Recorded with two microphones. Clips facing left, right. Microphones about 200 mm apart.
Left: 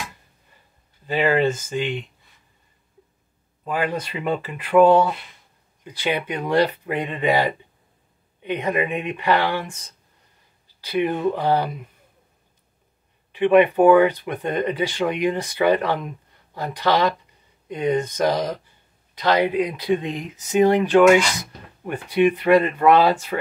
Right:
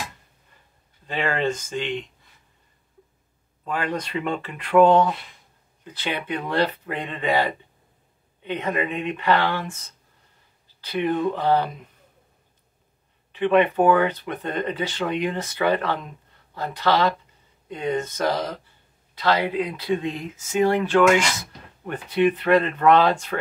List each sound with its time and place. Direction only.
1.0 s speech: 5° left (ahead or behind)
3.6 s speech: 10° left (ahead or behind)
13.3 s speech: 15° left (ahead or behind)